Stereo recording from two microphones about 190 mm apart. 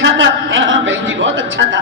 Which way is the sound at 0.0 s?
80° right.